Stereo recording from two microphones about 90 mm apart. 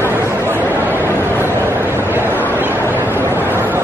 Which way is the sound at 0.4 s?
25° right (ahead or behind).